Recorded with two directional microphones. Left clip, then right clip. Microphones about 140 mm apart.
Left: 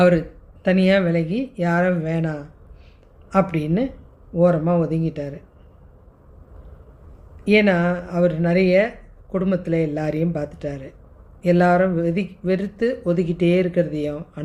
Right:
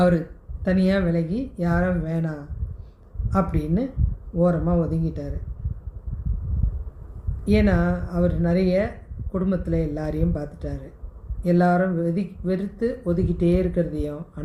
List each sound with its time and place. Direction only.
0.6 s speech: 55° left (ahead or behind)
7.4 s speech: 55° left (ahead or behind)